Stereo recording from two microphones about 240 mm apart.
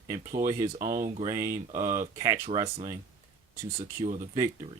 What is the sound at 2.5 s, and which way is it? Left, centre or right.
Speech, right.